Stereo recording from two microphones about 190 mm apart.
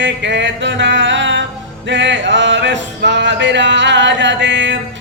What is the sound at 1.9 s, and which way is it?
Music, 70° right (ahead or behind).